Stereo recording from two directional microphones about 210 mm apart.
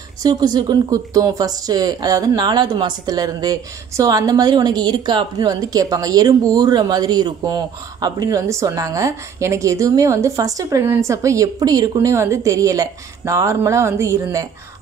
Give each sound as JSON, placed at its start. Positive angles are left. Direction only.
{"t": 0.2, "sound": "speech", "side_deg": -20}